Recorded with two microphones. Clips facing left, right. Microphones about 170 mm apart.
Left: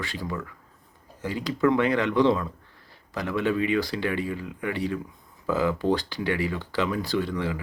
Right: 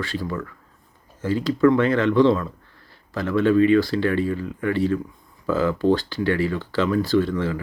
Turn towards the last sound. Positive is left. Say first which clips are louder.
# right 6 dB
turn(degrees=15)  # may be behind; listen again after turning